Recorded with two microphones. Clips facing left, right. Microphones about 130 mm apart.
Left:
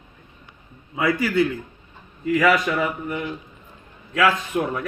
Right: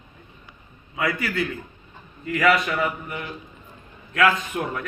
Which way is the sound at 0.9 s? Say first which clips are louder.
Left 5 dB; 30° left (ahead or behind).